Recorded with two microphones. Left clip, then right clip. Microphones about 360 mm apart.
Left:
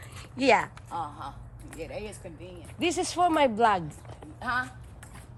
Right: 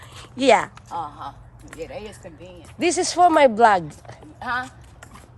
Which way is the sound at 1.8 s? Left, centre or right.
Right.